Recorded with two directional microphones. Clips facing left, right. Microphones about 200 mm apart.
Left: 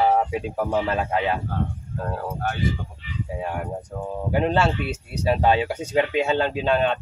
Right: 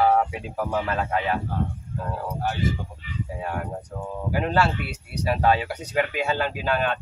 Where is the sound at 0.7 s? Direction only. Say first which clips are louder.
Left 1 dB; 25° left (ahead or behind).